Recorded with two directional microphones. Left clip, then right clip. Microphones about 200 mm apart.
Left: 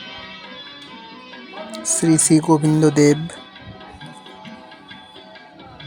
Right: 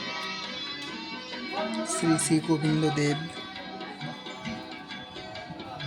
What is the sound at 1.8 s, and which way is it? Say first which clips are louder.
Speech: left 11 dB; 35° left (ahead or behind).